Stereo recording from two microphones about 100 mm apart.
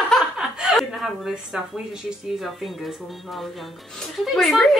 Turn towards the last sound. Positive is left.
turn(degrees=0)  # may be behind; listen again after turning